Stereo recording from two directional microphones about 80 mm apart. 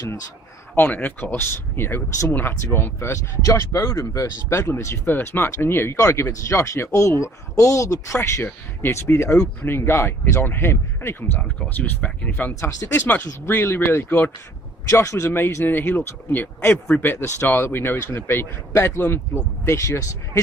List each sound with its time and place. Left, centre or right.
0.8 s speech: left
12.5 s speech: left
12.9 s speech: left
14.8 s speech: left